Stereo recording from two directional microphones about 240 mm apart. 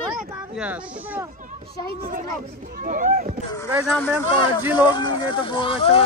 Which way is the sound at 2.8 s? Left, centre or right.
Right.